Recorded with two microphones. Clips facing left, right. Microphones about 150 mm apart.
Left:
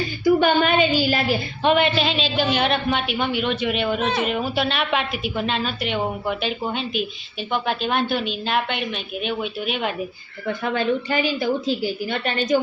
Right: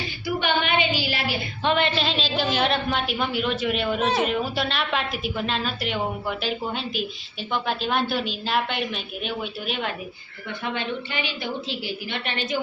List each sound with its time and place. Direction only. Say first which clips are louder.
0.3 s a sound: left 7 dB; 40° left (ahead or behind)
1.6 s a woman's voice: left 4 dB; 10° left (ahead or behind)
10.4 s a woman's voice: left 7 dB; 40° left (ahead or behind)